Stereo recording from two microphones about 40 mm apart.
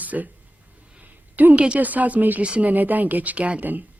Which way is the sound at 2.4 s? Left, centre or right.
Right.